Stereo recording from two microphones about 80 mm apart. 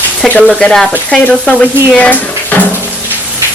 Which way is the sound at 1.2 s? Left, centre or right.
Centre.